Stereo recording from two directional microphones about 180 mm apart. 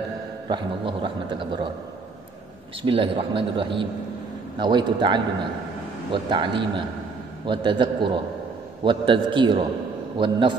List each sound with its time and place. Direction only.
0.5 s speech: 25° right (ahead or behind)
2.8 s speech: 30° right (ahead or behind)